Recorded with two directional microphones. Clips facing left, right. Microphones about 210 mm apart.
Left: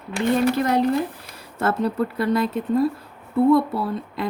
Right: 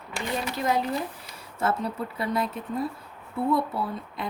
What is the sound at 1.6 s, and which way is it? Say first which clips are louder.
A woman's voice: left 6 dB; 75° left (ahead or behind).